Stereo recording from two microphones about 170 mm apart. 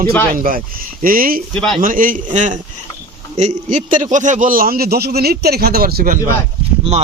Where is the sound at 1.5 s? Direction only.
5° left (ahead or behind).